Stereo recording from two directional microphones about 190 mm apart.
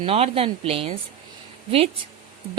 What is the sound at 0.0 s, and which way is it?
Speech, 30° right (ahead or behind).